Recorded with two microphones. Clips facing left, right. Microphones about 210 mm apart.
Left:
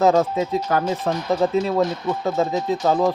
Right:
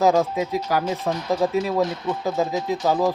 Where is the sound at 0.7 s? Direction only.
10° right (ahead or behind).